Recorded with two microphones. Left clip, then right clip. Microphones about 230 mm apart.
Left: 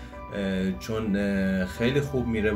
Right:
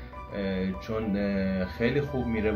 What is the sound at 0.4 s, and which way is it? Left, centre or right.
Speech, centre.